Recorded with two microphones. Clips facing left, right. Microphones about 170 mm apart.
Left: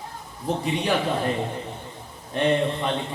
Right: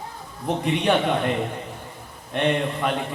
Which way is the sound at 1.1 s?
35° left (ahead or behind).